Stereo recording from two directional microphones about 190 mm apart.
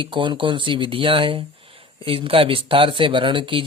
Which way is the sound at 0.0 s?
25° right (ahead or behind).